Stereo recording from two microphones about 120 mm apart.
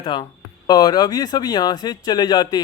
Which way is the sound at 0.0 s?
40° left (ahead or behind).